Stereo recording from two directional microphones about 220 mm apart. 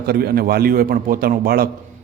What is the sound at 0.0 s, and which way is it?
A man's voice, 45° right (ahead or behind).